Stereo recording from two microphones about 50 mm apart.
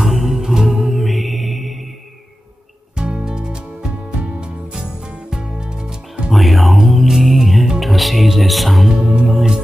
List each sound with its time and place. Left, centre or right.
0.0 s music: centre
3.0 s music: centre
5.3 s music: centre
6.3 s music: centre
8.9 s music: centre
9.3 s music: centre